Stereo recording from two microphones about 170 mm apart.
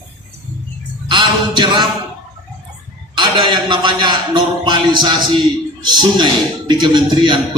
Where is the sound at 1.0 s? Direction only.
30° right (ahead or behind).